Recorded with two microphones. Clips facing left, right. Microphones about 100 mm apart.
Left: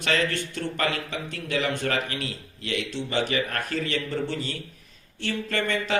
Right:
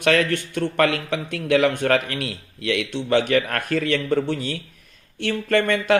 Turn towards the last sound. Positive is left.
turn(degrees=-55)  # may be behind; listen again after turning